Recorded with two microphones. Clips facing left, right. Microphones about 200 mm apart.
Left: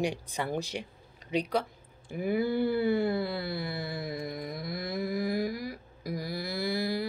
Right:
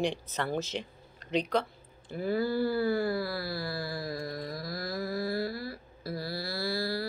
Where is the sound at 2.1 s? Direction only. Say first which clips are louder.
Left 1 dB; 15° left (ahead or behind).